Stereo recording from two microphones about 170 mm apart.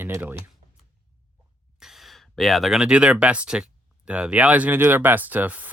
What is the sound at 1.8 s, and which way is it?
Speech, centre (ahead or behind).